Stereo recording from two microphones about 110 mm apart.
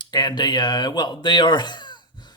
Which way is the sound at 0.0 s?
40° left (ahead or behind).